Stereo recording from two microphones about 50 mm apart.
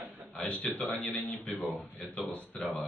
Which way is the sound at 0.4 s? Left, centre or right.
Left.